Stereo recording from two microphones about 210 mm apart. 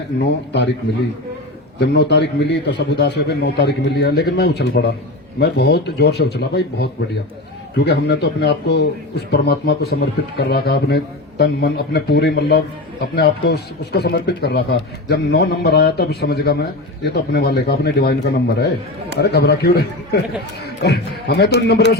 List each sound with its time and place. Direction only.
0.3 s a man's voice: 55° left (ahead or behind)
1.8 s a man's voice: 50° left (ahead or behind)